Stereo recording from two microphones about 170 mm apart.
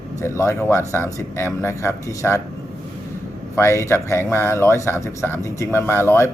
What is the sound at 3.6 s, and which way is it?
A man's voice, 15° left (ahead or behind).